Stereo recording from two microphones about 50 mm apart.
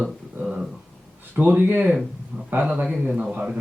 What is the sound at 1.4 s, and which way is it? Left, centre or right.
Speech, right.